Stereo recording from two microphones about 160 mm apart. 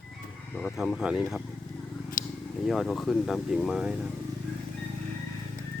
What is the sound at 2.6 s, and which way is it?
Speech, centre (ahead or behind).